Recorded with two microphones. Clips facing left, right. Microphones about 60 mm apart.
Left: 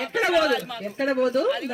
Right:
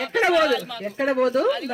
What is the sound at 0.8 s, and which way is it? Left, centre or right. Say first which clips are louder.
Speech: right 2 dB; right.